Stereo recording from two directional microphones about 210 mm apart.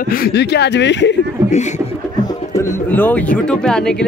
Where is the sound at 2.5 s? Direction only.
10° left (ahead or behind).